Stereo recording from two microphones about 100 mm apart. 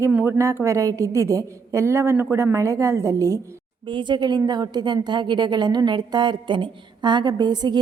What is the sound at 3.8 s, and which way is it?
A woman's voice, 50° right (ahead or behind).